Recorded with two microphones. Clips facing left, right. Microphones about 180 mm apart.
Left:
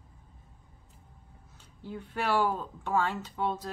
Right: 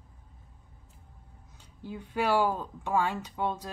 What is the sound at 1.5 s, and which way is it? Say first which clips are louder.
Speech: even; 15° right (ahead or behind).